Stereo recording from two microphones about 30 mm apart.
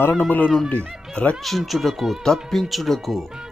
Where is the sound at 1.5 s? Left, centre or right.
Centre.